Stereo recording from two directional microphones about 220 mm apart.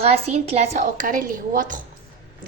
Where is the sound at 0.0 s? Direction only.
30° right (ahead or behind).